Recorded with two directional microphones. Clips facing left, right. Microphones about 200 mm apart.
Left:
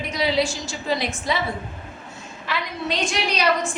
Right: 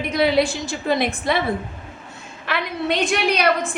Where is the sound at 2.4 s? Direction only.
60° right (ahead or behind).